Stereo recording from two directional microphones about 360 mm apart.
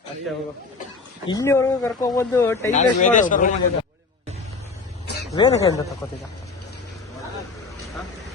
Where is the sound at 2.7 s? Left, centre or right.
Left.